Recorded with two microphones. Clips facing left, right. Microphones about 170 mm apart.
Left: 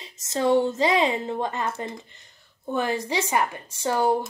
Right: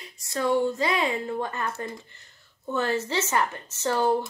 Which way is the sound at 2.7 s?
15° left (ahead or behind).